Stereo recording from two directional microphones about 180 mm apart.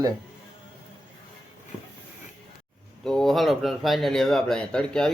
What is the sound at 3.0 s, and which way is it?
Speech, 5° left (ahead or behind).